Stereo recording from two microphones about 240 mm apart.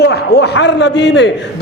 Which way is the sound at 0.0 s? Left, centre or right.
Left.